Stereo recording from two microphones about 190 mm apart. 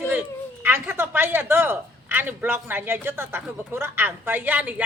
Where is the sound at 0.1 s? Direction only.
10° right (ahead or behind).